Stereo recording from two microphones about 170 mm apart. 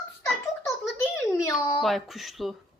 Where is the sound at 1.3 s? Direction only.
20° left (ahead or behind).